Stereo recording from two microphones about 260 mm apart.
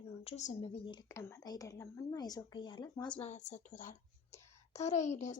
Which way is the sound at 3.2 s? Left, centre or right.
Left.